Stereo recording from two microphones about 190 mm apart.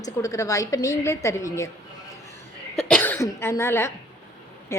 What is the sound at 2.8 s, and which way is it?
A woman's voice, 5° left (ahead or behind).